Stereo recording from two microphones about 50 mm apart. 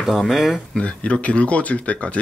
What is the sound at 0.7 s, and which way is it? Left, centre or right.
Speech, left.